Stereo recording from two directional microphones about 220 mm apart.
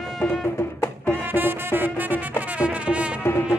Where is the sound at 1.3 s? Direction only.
10° right (ahead or behind).